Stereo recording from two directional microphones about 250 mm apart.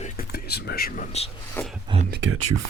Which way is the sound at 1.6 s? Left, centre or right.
Centre.